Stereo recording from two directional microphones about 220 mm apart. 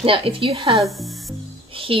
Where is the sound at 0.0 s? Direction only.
25° right (ahead or behind).